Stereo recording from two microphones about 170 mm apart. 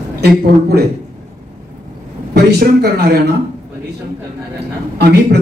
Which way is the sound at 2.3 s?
70° right (ahead or behind).